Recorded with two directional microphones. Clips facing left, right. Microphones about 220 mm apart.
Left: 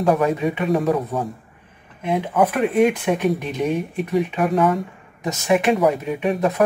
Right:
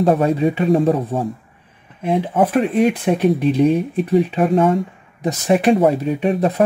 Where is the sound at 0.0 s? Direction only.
30° right (ahead or behind).